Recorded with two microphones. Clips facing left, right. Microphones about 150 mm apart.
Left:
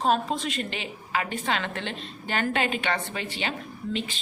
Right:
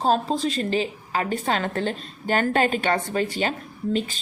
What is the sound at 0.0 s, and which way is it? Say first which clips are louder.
A woman's voice: right 3 dB; 35° right (ahead or behind).